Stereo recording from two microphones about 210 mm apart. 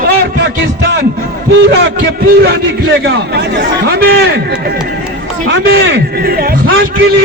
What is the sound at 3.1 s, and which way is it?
Speech, 50° right (ahead or behind).